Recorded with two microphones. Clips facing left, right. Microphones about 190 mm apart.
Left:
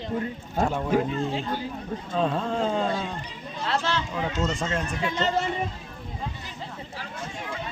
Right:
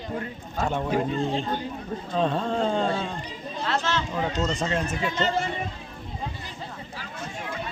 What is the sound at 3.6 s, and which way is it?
Speech, 35° left (ahead or behind).